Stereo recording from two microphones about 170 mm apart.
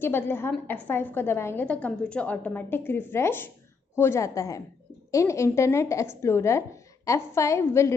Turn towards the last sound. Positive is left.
turn(degrees=15)  # may be behind; listen again after turning